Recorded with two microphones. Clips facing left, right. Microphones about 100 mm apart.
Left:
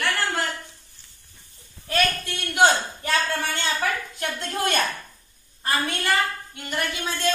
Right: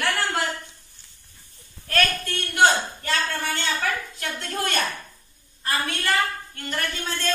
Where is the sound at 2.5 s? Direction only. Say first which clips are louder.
Even; 15° left (ahead or behind).